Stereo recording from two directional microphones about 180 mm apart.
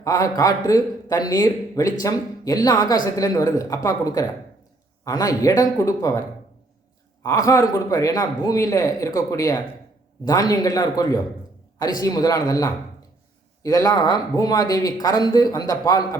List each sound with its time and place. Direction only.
0.0 s a man's voice: 20° left (ahead or behind)